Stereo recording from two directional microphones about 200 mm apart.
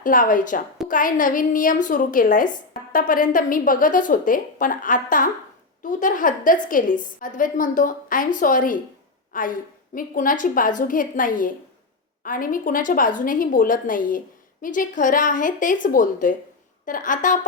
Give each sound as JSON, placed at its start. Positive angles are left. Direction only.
{"t": 0.0, "sound": "a woman's voice", "side_deg": 40}